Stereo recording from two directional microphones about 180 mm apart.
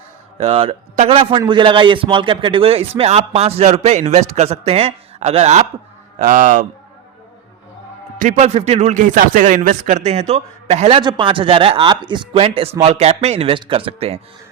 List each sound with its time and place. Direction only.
0.3 s a man's voice: 35° right (ahead or behind)
6.1 s speech: 45° right (ahead or behind)
8.2 s a man's voice: 40° right (ahead or behind)